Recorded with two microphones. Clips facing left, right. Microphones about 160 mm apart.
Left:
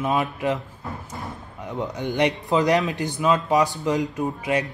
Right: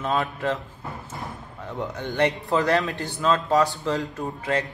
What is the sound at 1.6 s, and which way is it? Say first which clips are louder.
Speech: left 3 dB; 15° left (ahead or behind).